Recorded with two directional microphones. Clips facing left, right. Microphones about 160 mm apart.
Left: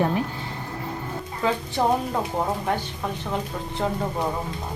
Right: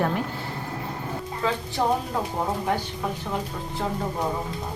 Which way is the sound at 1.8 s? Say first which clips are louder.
Left 2 dB; 5° left (ahead or behind).